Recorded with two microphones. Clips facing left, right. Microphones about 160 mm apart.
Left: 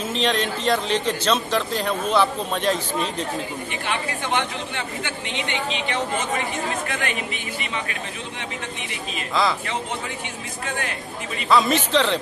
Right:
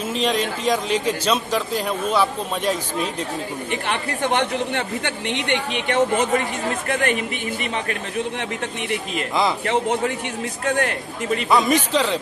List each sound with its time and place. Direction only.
0.1 s a man's voice: 10° right (ahead or behind)
3.8 s speech: 65° right (ahead or behind)
9.3 s speech: 20° right (ahead or behind)
9.7 s speech: 55° right (ahead or behind)
11.4 s a man's voice: 15° right (ahead or behind)